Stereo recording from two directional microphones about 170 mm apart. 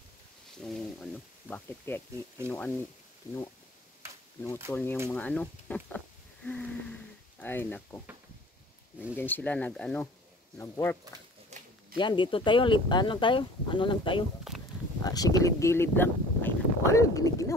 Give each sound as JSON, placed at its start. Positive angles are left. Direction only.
{"t": 0.6, "sound": "a sound", "side_deg": 5}
{"t": 2.4, "sound": "speech", "side_deg": 10}
{"t": 4.7, "sound": "speech", "side_deg": 10}
{"t": 9.1, "sound": "speech", "side_deg": 10}
{"t": 11.5, "sound": "a sound", "side_deg": -40}
{"t": 12.0, "sound": "speech", "side_deg": 30}